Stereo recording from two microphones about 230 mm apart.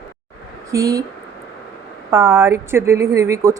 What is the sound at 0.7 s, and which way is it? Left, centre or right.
Speech, centre.